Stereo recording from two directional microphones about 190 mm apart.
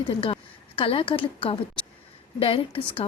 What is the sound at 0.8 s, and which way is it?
A woman's voice, 25° left (ahead or behind).